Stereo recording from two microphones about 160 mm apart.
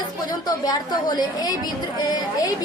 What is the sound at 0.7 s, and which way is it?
A woman's voice, 25° left (ahead or behind).